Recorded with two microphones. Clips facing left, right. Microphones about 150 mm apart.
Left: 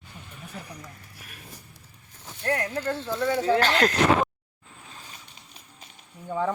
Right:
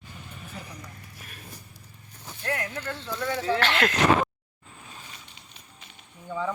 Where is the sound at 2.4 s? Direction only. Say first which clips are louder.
Left 5 dB; 35° left (ahead or behind).